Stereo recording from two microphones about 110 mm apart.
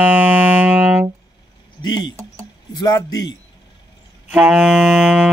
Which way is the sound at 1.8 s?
40° left (ahead or behind).